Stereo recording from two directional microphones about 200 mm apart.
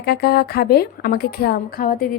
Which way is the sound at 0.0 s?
50° left (ahead or behind).